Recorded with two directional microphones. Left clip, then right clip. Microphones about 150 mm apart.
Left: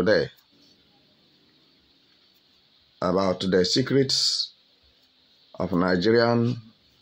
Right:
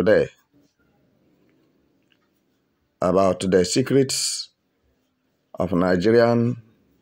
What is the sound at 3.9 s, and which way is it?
Speech, 25° right (ahead or behind).